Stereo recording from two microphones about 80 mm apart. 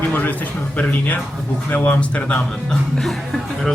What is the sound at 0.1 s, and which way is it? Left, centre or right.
Speech, left.